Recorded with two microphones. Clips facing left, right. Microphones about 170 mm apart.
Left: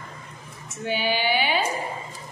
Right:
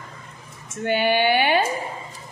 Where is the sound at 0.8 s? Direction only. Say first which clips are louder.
Right 5 dB; 60° right (ahead or behind).